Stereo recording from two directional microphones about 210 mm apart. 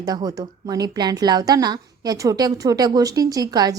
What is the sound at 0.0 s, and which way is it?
A woman's voice, 15° right (ahead or behind).